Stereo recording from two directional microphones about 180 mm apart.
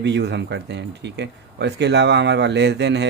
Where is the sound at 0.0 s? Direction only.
70° right (ahead or behind).